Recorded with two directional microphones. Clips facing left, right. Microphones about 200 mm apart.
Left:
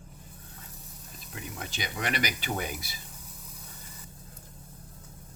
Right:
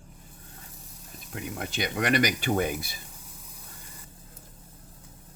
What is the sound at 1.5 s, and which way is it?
Speech, 55° right (ahead or behind).